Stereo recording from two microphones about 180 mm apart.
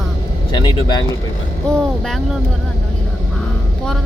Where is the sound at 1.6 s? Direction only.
5° left (ahead or behind).